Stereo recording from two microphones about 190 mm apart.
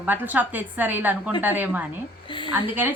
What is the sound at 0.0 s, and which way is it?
A woman's voice, 10° right (ahead or behind).